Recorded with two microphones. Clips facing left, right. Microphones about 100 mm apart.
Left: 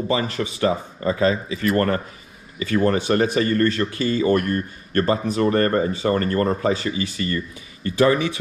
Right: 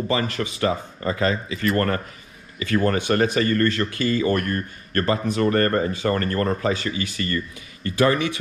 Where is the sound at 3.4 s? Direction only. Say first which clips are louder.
Left 1 dB; 30° left (ahead or behind).